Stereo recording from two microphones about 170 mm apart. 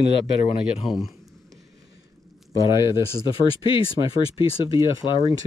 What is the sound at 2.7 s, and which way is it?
Speech, 15° right (ahead or behind).